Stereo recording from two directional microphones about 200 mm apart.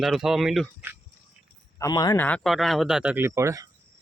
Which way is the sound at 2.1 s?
5° left (ahead or behind).